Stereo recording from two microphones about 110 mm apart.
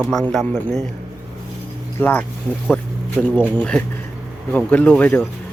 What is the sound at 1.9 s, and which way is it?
Speech, 15° left (ahead or behind).